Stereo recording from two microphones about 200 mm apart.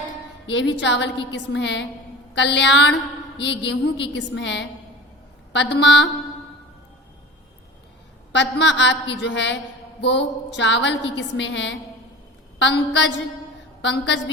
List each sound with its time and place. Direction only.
0.4 s a woman's voice: 60° left (ahead or behind)
8.3 s a woman's voice: 60° left (ahead or behind)